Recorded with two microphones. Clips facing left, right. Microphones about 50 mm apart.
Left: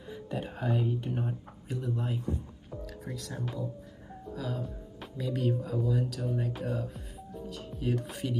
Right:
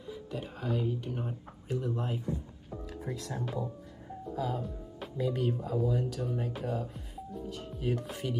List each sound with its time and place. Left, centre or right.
0.3 s a sound: centre
1.7 s a sound: centre
2.8 s music: right
3.2 s speech: right
4.3 s music: centre
5.1 s speech: centre